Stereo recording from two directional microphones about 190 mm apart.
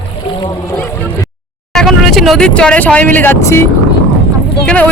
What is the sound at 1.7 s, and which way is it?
Speech, centre (ahead or behind).